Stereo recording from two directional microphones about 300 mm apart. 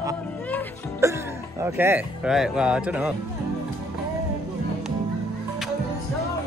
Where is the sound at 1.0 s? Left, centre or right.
Centre.